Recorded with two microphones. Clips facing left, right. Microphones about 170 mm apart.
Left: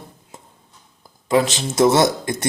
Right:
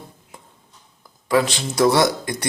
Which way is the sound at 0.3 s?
25° left (ahead or behind).